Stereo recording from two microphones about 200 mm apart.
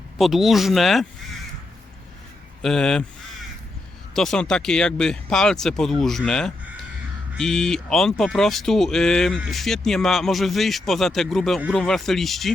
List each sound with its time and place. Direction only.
0.2 s speech: centre (ahead or behind)
2.6 s speech: 5° left (ahead or behind)
4.1 s speech: centre (ahead or behind)